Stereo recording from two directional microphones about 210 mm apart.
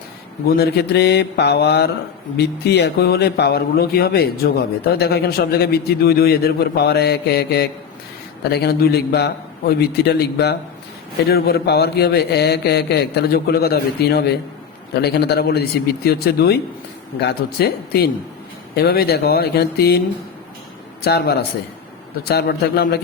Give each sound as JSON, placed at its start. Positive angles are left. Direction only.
{"t": 0.4, "sound": "a man's voice", "side_deg": 50}
{"t": 21.0, "sound": "a man's voice", "side_deg": 50}